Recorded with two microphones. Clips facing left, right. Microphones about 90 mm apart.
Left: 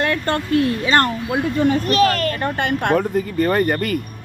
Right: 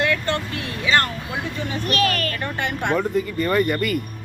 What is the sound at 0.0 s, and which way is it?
Speech, 45° left (ahead or behind).